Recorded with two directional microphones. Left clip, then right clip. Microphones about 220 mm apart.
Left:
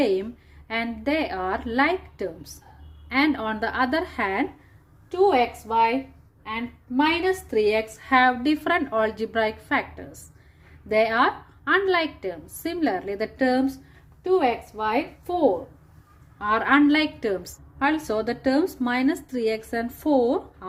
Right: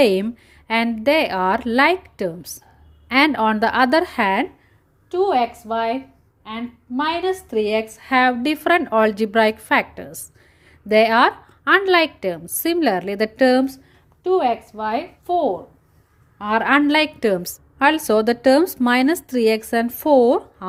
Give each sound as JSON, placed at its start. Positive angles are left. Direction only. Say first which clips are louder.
{"t": 0.0, "sound": "a woman's voice", "louder": "right 7 dB", "side_deg": -45}
{"t": 5.1, "sound": "a woman's voice", "louder": "right 2 dB", "side_deg": -35}
{"t": 14.3, "sound": "a woman's voice", "louder": "right 3 dB", "side_deg": -35}
{"t": 16.4, "sound": "a woman's voice", "louder": "right 3 dB", "side_deg": -45}